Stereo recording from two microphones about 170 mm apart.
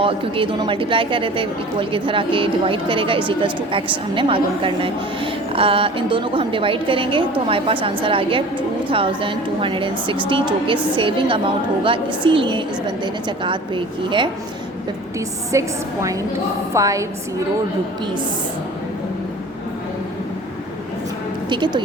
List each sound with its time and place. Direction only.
0.0 s a woman's voice: 30° right (ahead or behind)
15.5 s a woman's voice: 20° right (ahead or behind)
21.5 s a woman's voice: 25° right (ahead or behind)